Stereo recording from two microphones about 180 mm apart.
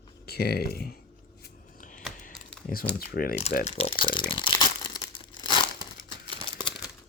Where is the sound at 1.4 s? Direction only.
50° left (ahead or behind).